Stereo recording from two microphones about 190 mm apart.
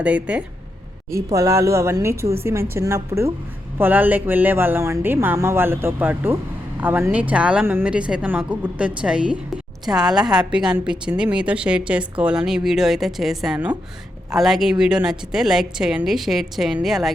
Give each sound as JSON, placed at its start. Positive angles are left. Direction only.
{"t": 0.0, "sound": "a woman's voice", "side_deg": -5}